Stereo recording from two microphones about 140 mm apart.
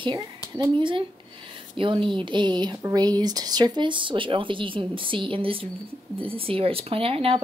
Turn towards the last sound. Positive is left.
turn(degrees=-40)  # may be behind; listen again after turning